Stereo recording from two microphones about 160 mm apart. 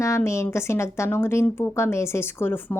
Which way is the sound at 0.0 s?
20° left (ahead or behind).